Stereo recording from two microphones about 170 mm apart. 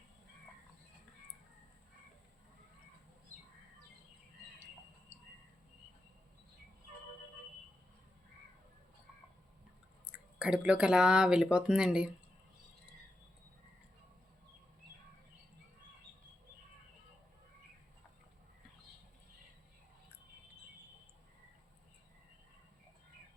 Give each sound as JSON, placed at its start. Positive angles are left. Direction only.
{"t": 10.1, "sound": "speech", "side_deg": -5}